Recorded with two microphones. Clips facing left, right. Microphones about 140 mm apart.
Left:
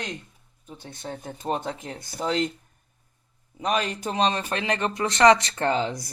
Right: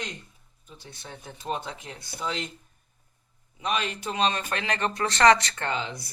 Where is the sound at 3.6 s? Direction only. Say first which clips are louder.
Left 4 dB; 40° left (ahead or behind).